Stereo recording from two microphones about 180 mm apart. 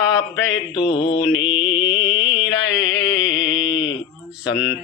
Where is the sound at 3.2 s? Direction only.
90° left.